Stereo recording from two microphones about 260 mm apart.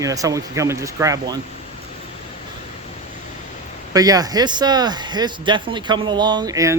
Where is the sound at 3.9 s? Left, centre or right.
Centre.